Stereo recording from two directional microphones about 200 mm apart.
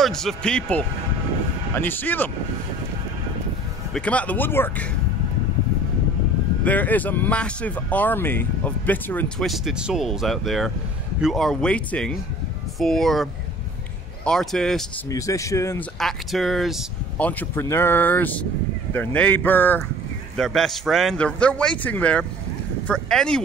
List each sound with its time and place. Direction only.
0.0 s a man's voice: centre (ahead or behind)
3.9 s speech: 5° left (ahead or behind)
6.6 s a man's voice: 10° left (ahead or behind)
15.0 s speech: 15° left (ahead or behind)
16.0 s a man's voice: centre (ahead or behind)